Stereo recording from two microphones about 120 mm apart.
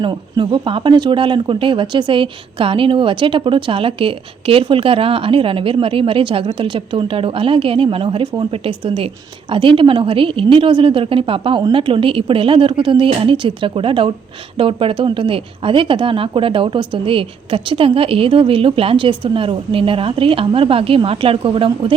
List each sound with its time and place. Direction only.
0.0 s speech: 40° right (ahead or behind)